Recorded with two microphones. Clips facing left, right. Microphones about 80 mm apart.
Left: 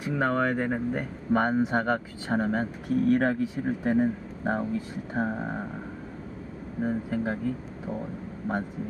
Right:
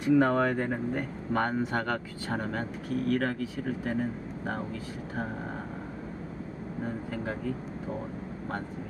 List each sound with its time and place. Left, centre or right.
0.2 s speech: centre; by 5.6 s left
6.8 s speech: left